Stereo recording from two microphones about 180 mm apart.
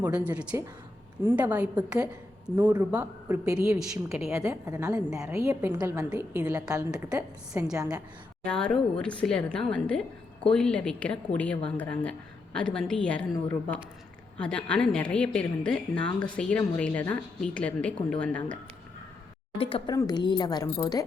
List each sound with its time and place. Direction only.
0.0 s speech: 5° right (ahead or behind)
3.8 s a woman's voice: centre (ahead or behind)
4.3 s a woman's voice: 15° right (ahead or behind)
6.1 s speech: 5° right (ahead or behind)
6.9 s a woman's voice: 5° right (ahead or behind)
14.3 s a woman's voice: 5° left (ahead or behind)
19.5 s speech: 30° left (ahead or behind)